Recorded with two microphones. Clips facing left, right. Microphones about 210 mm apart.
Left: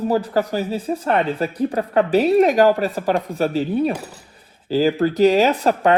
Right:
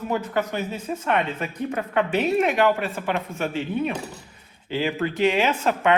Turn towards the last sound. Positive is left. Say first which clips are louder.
# left 4 dB
turn(degrees=40)  # may be behind; listen again after turning